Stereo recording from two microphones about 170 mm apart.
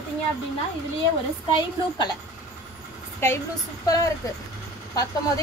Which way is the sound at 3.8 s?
20° left (ahead or behind).